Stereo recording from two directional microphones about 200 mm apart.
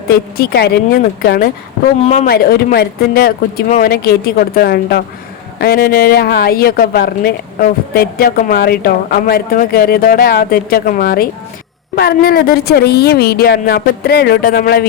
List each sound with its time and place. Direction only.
0.1 s speech: 50° left (ahead or behind)
2.0 s speech: 40° left (ahead or behind)